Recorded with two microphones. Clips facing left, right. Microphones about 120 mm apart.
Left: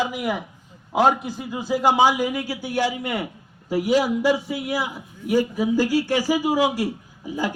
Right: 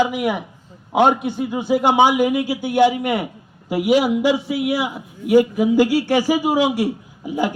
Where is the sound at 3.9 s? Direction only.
70° right (ahead or behind).